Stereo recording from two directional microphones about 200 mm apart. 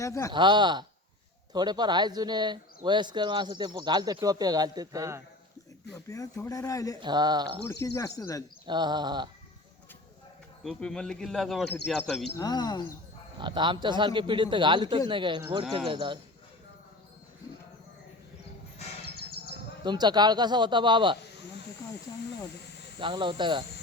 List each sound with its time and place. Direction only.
0.0 s speech: 15° left (ahead or behind)
0.3 s speech: 25° right (ahead or behind)
6.1 s speech: 15° left (ahead or behind)
7.0 s speech: 20° right (ahead or behind)
7.7 s speech: 15° left (ahead or behind)
8.6 s speech: 20° right (ahead or behind)
10.6 s speech: centre (ahead or behind)
12.3 s speech: 20° left (ahead or behind)
13.4 s speech: 25° right (ahead or behind)
19.1 s bird: 50° left (ahead or behind)
19.8 s speech: 20° right (ahead or behind)
23.0 s speech: 25° right (ahead or behind)